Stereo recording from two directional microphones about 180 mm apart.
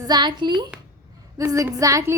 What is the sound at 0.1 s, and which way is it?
A woman's voice, 25° right (ahead or behind).